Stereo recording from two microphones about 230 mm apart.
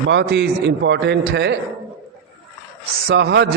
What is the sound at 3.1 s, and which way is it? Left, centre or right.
Mantra, right.